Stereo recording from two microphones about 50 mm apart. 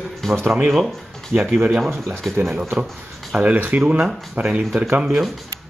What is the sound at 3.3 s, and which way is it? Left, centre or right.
Speech, right.